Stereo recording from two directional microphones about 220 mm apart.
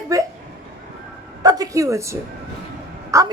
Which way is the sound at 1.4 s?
15° right (ahead or behind).